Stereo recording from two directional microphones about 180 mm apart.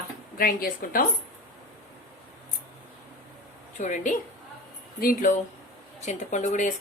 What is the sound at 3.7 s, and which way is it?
A woman's voice, 45° left (ahead or behind).